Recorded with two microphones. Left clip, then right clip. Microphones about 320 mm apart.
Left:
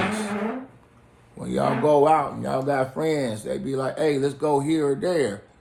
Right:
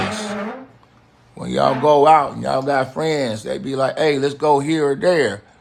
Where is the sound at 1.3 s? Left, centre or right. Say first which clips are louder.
Right 6 dB; right.